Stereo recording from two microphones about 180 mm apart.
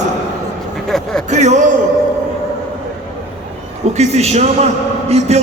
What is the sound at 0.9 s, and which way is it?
Speech, centre (ahead or behind).